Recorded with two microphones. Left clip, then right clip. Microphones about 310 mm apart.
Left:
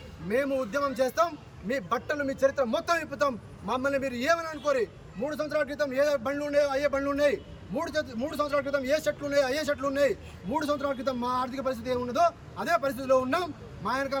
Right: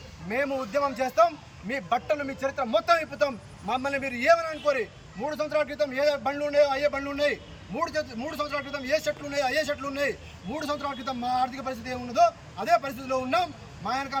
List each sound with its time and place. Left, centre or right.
0.3 s a man's voice: centre